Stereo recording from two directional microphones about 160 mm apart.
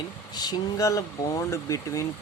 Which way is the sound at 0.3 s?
25° left (ahead or behind).